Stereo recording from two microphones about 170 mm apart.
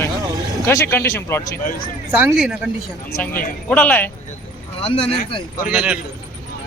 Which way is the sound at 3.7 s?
10° left (ahead or behind).